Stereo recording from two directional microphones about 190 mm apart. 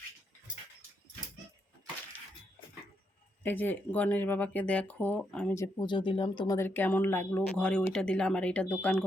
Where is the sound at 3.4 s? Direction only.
10° left (ahead or behind).